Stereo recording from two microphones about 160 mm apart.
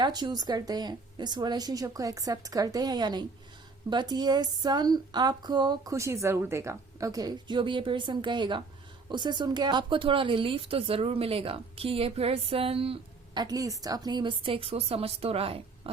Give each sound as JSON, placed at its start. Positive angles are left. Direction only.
{"t": 0.0, "sound": "a woman's voice", "side_deg": -25}